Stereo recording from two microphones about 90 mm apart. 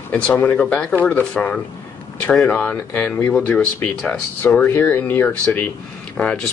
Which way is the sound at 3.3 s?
10° left (ahead or behind).